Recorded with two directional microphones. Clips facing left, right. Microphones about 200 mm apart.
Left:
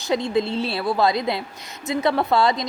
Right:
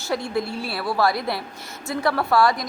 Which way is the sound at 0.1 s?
20° left (ahead or behind).